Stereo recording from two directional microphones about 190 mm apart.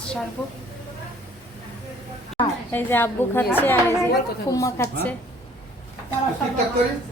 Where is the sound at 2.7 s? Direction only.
10° left (ahead or behind).